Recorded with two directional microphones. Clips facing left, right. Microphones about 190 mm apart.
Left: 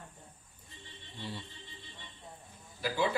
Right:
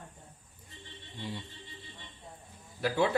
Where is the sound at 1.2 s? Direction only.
15° right (ahead or behind).